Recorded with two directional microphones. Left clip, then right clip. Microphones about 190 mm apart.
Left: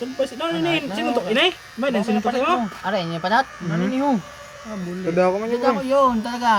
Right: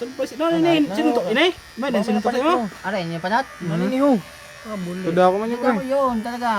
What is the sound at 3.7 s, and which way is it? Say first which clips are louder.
Speech: right 1 dB; 50° right (ahead or behind).